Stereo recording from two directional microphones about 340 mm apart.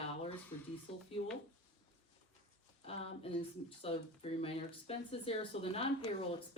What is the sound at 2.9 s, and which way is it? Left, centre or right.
Speech, centre.